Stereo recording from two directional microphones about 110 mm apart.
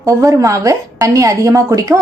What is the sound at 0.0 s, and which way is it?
A woman's voice, 30° right (ahead or behind).